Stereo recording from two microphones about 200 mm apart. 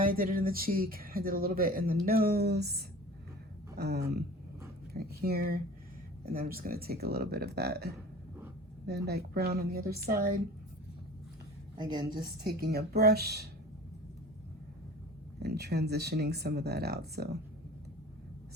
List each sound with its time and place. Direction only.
0.0 s speech: 45° right (ahead or behind)
9.0 s speech: 50° right (ahead or behind)
11.8 s a woman's voice: 20° right (ahead or behind)
12.1 s speech: 50° right (ahead or behind)
15.4 s speech: 55° right (ahead or behind)